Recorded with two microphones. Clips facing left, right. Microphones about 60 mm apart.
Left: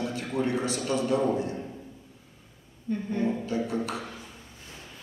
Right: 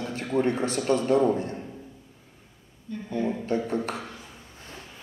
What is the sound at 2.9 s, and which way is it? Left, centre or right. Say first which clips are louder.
Speech: left 1 dB; left.